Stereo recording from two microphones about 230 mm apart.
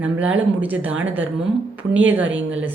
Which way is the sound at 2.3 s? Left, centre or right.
Right.